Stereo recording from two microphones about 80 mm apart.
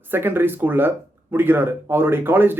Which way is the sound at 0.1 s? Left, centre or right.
Right.